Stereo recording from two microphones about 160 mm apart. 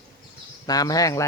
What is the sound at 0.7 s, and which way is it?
Speech, 25° left (ahead or behind).